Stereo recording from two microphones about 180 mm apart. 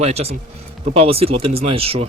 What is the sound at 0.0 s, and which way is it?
Speech, 35° right (ahead or behind).